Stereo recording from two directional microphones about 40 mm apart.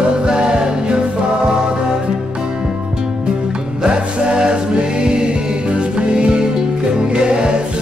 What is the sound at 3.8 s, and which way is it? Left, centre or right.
Music, right.